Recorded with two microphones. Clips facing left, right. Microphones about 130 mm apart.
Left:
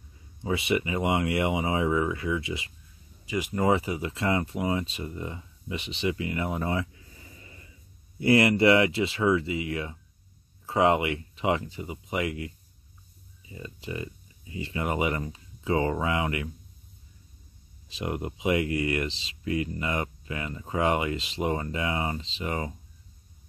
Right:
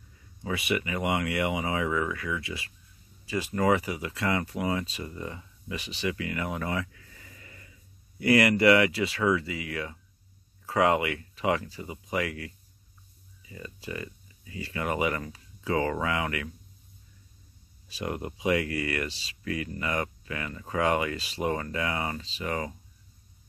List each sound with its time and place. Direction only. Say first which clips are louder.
0.4 s speech: left 3 dB; 25° left (ahead or behind)
17.8 s speech: left 1 dB; 20° left (ahead or behind)